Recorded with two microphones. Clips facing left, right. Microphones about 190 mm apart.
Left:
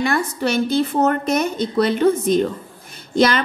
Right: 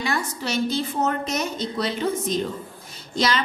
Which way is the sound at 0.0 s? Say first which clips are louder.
Left 7 dB; 55° left (ahead or behind).